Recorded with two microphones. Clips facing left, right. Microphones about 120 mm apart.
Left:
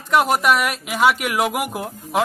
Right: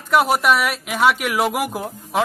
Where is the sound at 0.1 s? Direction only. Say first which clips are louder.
Even; centre (ahead or behind).